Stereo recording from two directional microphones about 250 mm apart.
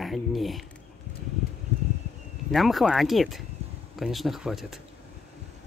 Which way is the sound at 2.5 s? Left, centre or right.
Centre.